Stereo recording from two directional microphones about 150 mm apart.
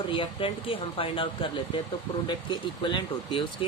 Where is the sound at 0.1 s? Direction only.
35° left (ahead or behind).